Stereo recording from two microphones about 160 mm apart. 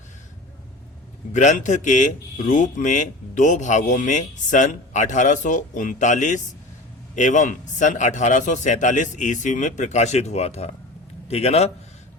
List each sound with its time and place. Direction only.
1.3 s a man's voice: 50° left (ahead or behind)